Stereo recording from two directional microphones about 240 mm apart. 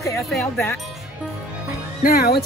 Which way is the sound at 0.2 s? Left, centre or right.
Centre.